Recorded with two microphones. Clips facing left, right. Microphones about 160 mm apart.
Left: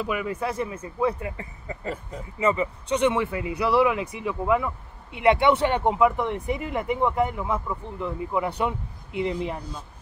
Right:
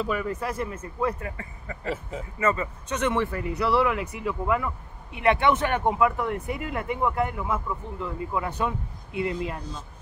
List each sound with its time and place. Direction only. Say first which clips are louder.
0.0 s speech: left 1 dB; 10° left (ahead or behind)
1.3 s speech: left 2 dB; 20° left (ahead or behind)
1.9 s speech: right 2 dB; 5° right (ahead or behind)
2.4 s speech: left 3 dB; 15° left (ahead or behind)